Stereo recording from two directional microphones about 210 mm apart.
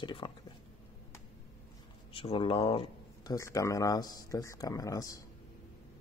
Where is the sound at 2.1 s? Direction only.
25° left (ahead or behind).